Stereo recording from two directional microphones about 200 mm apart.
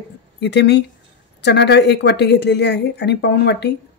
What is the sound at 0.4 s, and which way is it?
A woman's voice, 60° left (ahead or behind).